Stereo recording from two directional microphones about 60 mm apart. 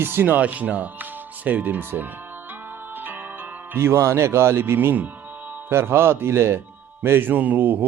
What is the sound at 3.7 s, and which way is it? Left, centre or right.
Speech, right.